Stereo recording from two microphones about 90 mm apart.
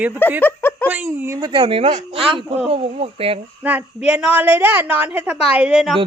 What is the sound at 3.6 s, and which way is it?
A woman's voice, 15° right (ahead or behind).